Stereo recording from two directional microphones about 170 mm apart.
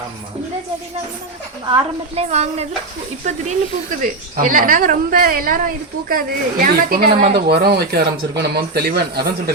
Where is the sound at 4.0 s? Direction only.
50° right (ahead or behind).